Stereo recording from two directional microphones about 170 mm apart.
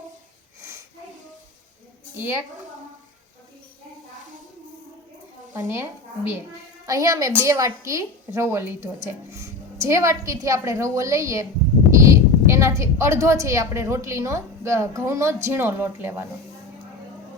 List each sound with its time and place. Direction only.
0.6 s sniff: 15° right (ahead or behind)
5.6 s a woman's voice: 15° right (ahead or behind)